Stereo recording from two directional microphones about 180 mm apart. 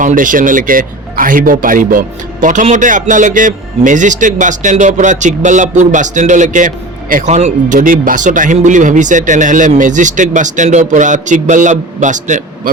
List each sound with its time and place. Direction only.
0.0 s a man's voice: 45° right (ahead or behind)